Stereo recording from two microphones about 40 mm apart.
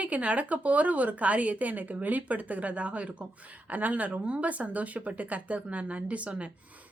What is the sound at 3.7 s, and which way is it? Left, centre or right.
Speech, right.